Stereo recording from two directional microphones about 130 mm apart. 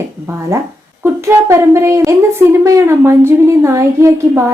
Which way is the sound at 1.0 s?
20° right (ahead or behind).